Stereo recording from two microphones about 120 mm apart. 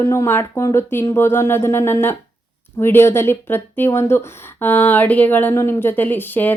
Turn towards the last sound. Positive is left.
turn(degrees=15)  # may be behind; listen again after turning